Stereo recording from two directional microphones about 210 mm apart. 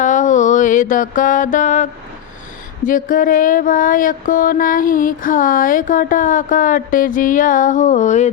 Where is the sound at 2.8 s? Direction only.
40° left (ahead or behind).